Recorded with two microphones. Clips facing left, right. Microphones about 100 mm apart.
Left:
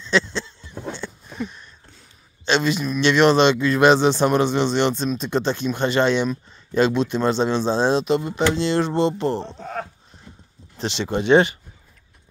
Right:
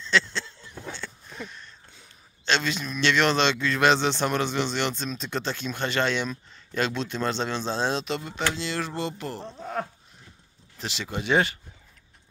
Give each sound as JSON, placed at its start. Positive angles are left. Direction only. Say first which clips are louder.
{"t": 0.0, "sound": "a sound", "louder": "left 4 dB", "side_deg": 15}
{"t": 2.4, "sound": "a man's voice", "louder": "left 6 dB", "side_deg": 15}
{"t": 10.8, "sound": "a man's voice", "louder": "left 9 dB", "side_deg": 30}